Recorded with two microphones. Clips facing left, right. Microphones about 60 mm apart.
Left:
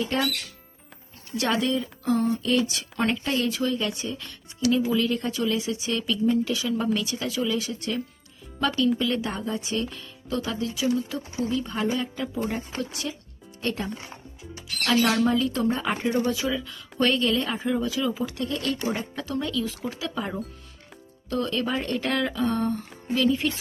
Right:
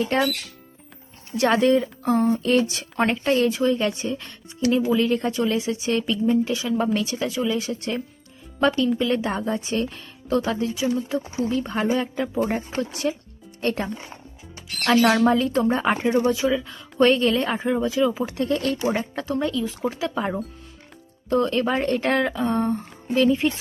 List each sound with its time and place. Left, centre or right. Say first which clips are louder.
0.0 s speech: right 4 dB; right
1.4 s speech: right 7 dB; right
11.4 s speech: right 2 dB; right
16.2 s speech: right 5 dB; right